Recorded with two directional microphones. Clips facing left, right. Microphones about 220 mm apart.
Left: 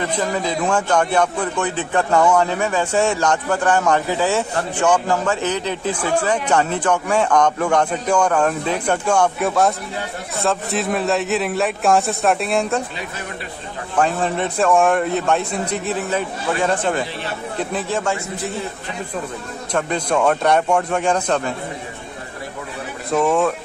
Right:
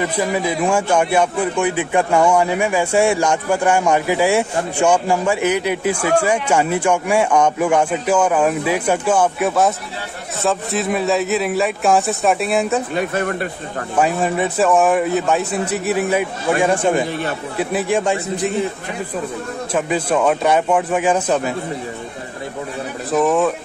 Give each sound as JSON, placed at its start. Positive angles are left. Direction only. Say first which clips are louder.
{"t": 0.0, "sound": "a man's voice", "louder": "right 2 dB", "side_deg": -10}
{"t": 12.9, "sound": "speech", "louder": "right 10 dB", "side_deg": -55}
{"t": 13.9, "sound": "a man's voice", "louder": "right 2 dB", "side_deg": -10}
{"t": 19.7, "sound": "speech", "louder": "right 1 dB", "side_deg": -5}
{"t": 23.1, "sound": "speech", "louder": "right 1 dB", "side_deg": 0}